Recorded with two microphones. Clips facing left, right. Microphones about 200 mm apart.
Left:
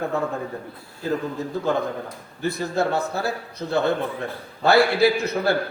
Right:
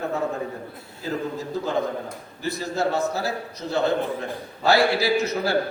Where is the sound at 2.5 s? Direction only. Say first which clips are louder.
Left 1 dB; 55° left (ahead or behind).